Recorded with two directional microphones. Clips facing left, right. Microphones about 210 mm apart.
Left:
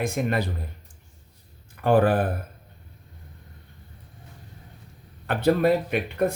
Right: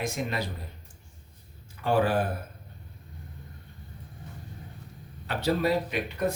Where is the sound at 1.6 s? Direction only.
55° left (ahead or behind).